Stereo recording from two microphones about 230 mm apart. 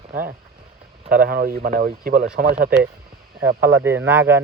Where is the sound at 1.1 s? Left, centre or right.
Right.